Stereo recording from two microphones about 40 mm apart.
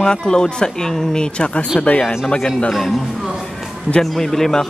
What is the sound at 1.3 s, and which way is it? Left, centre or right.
Speech, left.